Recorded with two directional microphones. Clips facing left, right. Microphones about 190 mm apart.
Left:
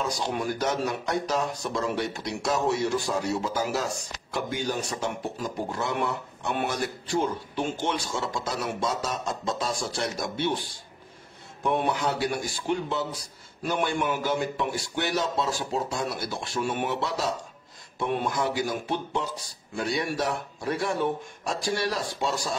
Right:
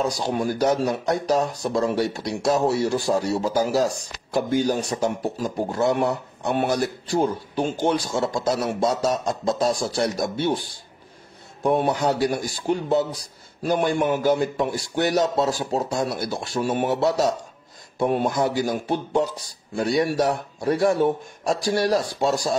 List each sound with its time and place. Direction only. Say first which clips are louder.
0.0 s speech: right 5 dB; 35° right (ahead or behind)
11.6 s speech: right 5 dB; 40° right (ahead or behind)